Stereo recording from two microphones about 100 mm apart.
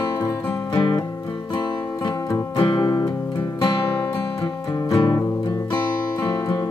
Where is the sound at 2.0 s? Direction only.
35° left (ahead or behind).